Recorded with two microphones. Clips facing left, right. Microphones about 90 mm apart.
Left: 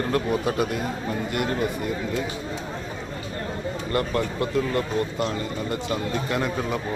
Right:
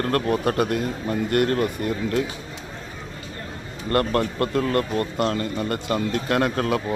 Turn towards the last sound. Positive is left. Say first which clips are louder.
# right 4 dB
turn(degrees=-70)  # may be behind; listen again after turning